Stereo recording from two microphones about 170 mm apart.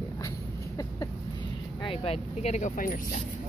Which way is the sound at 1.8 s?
35° left (ahead or behind).